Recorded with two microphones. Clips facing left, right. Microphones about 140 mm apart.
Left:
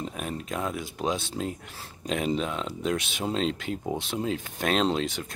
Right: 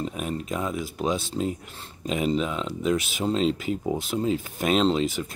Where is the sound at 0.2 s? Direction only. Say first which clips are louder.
Even; centre (ahead or behind).